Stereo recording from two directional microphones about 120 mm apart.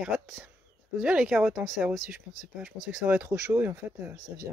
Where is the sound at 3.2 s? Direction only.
25° right (ahead or behind).